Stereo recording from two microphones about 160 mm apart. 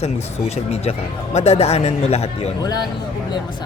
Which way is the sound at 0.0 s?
40° left (ahead or behind).